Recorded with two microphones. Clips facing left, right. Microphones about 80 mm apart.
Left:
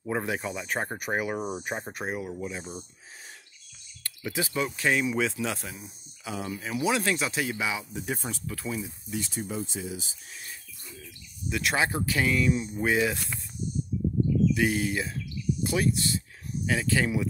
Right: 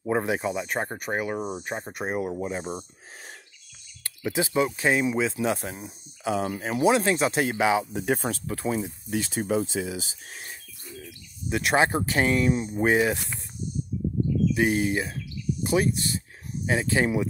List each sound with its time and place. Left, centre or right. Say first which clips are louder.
0.0 s speech: right 5 dB; right
0.7 s speech: right 1 dB; centre
2.1 s speech: right 5 dB; right
4.0 s speech: right 4 dB; right
5.7 s speech: right 5 dB; right
6.3 s speech: right 5 dB; right
8.5 s speech: right 5 dB; right
9.1 s speech: right 7 dB; right
11.4 s speech: right 5 dB; right
13.1 s speech: right 4 dB; centre
14.5 s speech: right 3 dB; right